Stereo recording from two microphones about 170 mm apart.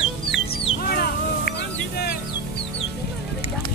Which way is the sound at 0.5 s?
65° left (ahead or behind).